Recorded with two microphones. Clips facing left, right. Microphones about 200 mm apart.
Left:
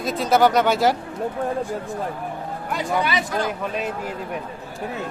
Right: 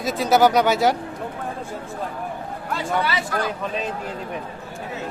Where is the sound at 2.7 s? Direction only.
15° left (ahead or behind).